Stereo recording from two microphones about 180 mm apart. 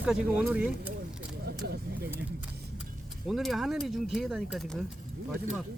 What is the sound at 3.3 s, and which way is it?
Speech, centre (ahead or behind).